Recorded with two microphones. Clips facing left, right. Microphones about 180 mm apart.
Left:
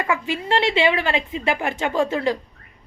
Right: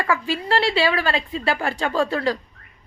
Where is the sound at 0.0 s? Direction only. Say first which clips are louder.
Even; 20° left (ahead or behind).